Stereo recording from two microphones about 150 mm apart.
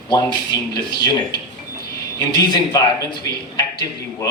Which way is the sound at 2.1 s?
25° left (ahead or behind).